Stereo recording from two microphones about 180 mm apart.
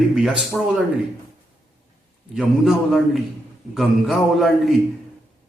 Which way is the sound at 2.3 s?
Centre (ahead or behind).